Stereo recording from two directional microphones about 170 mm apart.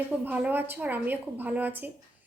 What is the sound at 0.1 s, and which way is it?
A woman's voice, 10° right (ahead or behind).